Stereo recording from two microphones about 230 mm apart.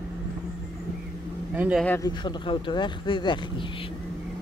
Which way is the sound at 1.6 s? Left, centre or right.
Centre.